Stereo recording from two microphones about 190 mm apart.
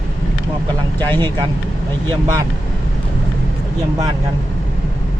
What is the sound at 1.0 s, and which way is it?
Speech, 10° left (ahead or behind).